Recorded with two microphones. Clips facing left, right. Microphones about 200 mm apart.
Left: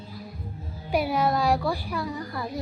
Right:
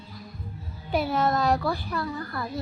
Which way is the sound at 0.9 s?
10° left (ahead or behind).